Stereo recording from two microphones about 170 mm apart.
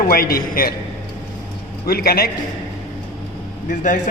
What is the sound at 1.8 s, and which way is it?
Speech, 65° left (ahead or behind).